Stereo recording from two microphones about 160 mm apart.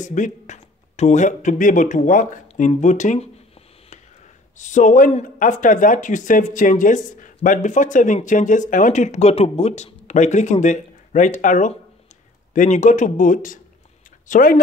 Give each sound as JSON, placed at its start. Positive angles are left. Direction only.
{"t": 0.0, "sound": "speech", "side_deg": 50}
{"t": 4.6, "sound": "speech", "side_deg": 50}